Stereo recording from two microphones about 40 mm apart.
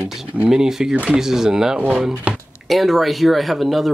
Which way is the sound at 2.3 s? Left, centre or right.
Right.